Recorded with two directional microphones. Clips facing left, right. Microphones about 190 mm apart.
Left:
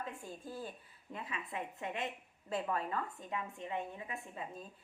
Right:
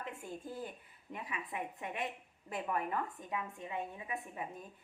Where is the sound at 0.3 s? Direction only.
20° right (ahead or behind).